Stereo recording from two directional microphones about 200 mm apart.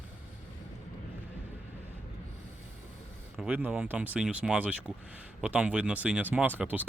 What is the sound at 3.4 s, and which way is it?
Speech, 5° right (ahead or behind).